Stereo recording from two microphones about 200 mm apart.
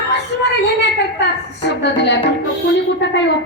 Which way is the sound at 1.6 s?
60° left (ahead or behind).